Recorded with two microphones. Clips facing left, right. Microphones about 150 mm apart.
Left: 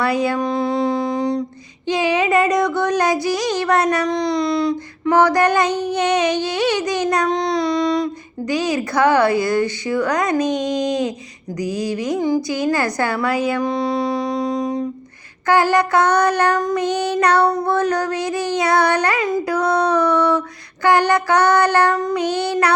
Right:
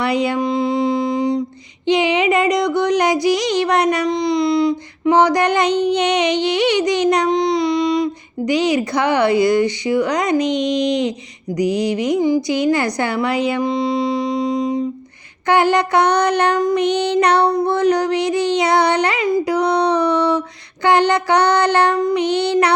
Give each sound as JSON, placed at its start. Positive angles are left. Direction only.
{"t": 0.0, "sound": "a sound", "side_deg": -20}
{"t": 11.5, "sound": "a woman's voice", "side_deg": -20}
{"t": 15.4, "sound": "child singing", "side_deg": -20}